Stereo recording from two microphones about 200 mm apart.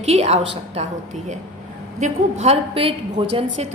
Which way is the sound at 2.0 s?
30° right (ahead or behind).